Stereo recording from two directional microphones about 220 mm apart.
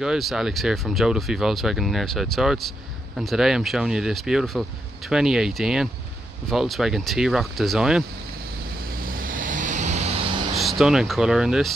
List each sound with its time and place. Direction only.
0.0 s speech: centre (ahead or behind)
8.9 s vehicle: 40° right (ahead or behind)
10.5 s speech: centre (ahead or behind)